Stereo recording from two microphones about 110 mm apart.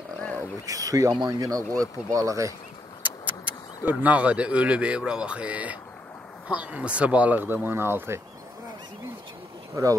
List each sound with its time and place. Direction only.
0.2 s wild animals: 15° left (ahead or behind)
0.7 s speech: 30° right (ahead or behind)
3.0 s speech: 15° right (ahead or behind)
9.8 s speech: 30° right (ahead or behind)